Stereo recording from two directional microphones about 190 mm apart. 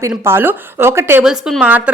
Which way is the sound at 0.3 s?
10° right (ahead or behind).